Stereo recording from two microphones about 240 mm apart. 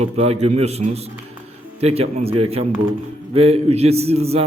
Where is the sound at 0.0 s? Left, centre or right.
Right.